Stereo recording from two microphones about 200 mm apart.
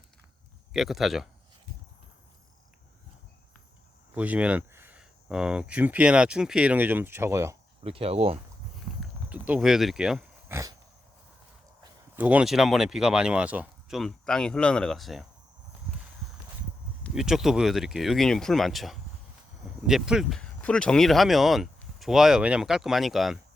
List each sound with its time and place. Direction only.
0.7 s speech: centre (ahead or behind)
4.1 s speech: 5° right (ahead or behind)
7.9 s speech: 30° right (ahead or behind)
9.0 s a sound: 5° right (ahead or behind)
12.1 s speech: 10° right (ahead or behind)
17.0 s speech: centre (ahead or behind)